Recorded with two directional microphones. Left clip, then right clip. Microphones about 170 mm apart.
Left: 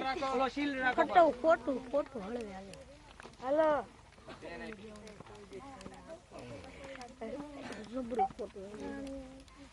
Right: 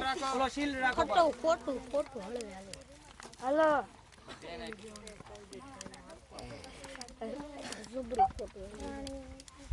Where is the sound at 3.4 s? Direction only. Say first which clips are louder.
Right 2 dB; 75° right (ahead or behind).